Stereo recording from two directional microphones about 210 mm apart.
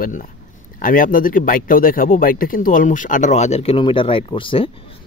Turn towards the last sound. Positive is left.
turn(degrees=25)  # may be behind; listen again after turning